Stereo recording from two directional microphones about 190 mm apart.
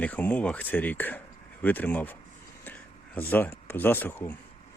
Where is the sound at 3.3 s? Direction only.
10° left (ahead or behind).